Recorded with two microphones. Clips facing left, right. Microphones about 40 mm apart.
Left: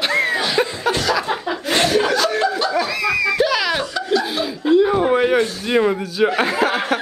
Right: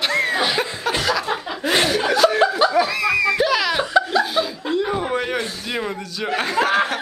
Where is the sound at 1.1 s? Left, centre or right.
Centre.